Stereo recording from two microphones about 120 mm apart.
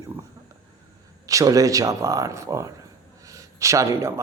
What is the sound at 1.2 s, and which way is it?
A man's voice, 30° right (ahead or behind).